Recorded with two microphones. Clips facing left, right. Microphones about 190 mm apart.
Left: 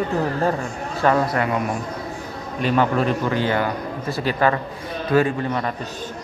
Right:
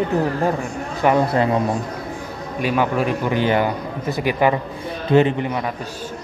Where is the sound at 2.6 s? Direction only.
10° right (ahead or behind).